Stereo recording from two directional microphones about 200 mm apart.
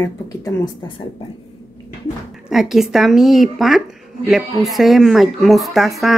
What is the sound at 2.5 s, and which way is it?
Speech, centre (ahead or behind).